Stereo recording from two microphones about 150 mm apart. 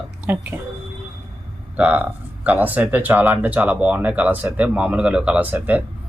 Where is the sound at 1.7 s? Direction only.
10° right (ahead or behind).